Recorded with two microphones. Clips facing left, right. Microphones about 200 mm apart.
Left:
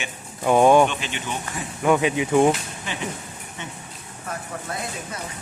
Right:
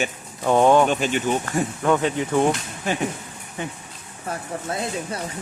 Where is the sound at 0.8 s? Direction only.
45° right (ahead or behind).